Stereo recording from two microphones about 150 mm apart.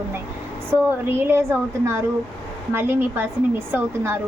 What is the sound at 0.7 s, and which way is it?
A woman's voice, 15° right (ahead or behind).